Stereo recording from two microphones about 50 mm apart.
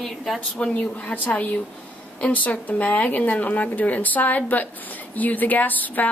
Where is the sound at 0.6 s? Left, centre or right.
Left.